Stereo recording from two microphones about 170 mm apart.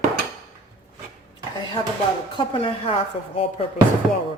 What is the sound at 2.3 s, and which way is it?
Speech, 30° left (ahead or behind).